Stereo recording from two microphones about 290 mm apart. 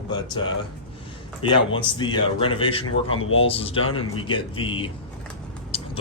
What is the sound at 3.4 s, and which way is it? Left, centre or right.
Speech, centre.